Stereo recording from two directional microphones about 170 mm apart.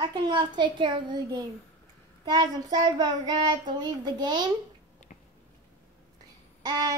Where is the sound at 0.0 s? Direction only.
25° right (ahead or behind).